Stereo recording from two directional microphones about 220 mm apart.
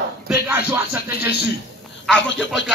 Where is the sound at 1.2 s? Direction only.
45° left (ahead or behind).